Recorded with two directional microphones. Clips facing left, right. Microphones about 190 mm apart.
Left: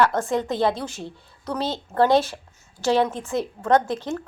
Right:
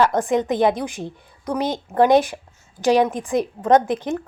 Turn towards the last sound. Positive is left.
turn(degrees=-15)  # may be behind; listen again after turning